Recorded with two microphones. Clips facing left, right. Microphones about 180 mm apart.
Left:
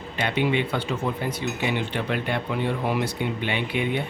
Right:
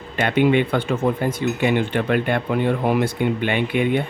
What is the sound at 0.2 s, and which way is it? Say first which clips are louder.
Speech: right 7 dB; 55° right (ahead or behind).